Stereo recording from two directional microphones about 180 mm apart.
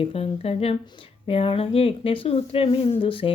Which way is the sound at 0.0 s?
35° left (ahead or behind).